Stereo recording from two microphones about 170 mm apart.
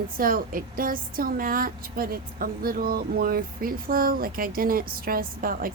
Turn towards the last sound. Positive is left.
turn(degrees=-55)  # may be behind; listen again after turning